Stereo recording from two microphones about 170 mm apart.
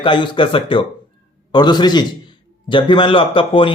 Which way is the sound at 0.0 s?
30° left (ahead or behind).